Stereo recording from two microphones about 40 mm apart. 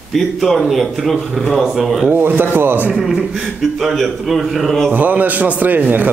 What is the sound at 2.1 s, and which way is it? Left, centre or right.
Speech, right.